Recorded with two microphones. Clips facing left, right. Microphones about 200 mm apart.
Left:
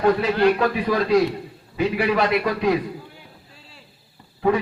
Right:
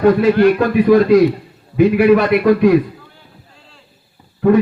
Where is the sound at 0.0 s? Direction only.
50° right (ahead or behind).